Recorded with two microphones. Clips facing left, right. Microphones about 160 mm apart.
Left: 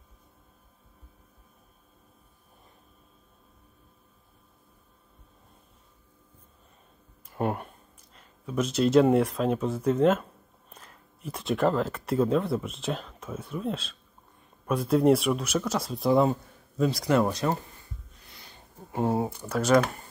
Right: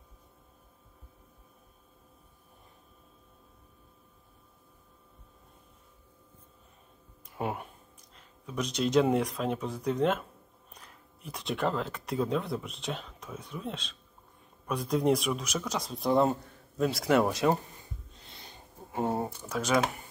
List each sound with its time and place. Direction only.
7.2 s speech: centre (ahead or behind)
18.1 s wheeze: 25° right (ahead or behind)
18.9 s speech: 5° left (ahead or behind)